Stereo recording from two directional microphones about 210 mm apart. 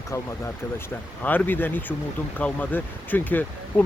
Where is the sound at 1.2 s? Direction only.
10° left (ahead or behind).